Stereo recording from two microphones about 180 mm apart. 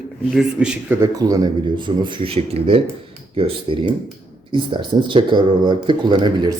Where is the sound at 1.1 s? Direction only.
20° right (ahead or behind).